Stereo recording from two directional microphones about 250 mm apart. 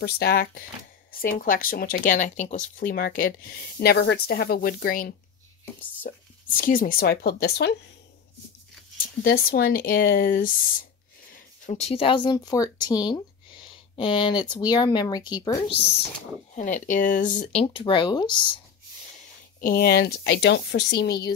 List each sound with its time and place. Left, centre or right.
0.0 s speech: left
9.2 s speech: left
11.6 s speech: left
16.5 s speech: left
19.6 s speech: left